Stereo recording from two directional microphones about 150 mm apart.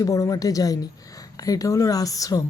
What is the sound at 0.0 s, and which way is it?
Speech, 25° left (ahead or behind).